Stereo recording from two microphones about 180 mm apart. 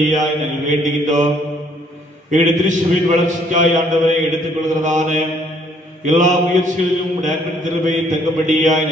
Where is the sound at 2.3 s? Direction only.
45° right (ahead or behind).